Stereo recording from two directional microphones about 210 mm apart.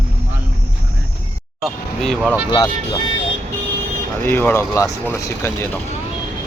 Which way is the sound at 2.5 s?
20° left (ahead or behind).